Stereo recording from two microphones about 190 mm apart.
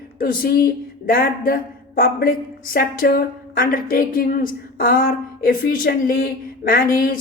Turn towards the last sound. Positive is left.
turn(degrees=50)  # may be behind; listen again after turning